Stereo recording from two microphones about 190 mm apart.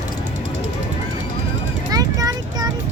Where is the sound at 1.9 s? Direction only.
20° right (ahead or behind).